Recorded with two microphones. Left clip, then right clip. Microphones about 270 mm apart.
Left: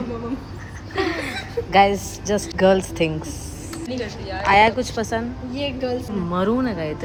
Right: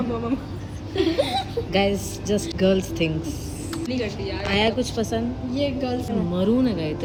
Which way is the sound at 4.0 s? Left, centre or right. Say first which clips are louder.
Even; right.